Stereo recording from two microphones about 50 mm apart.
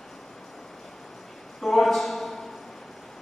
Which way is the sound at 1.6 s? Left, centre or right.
Centre.